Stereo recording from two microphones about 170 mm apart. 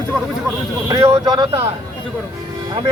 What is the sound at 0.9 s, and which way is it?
Speech, 15° right (ahead or behind).